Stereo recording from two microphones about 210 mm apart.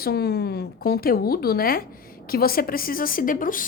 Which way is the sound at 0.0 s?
50° left (ahead or behind).